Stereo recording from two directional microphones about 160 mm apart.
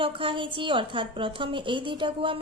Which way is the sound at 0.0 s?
30° right (ahead or behind).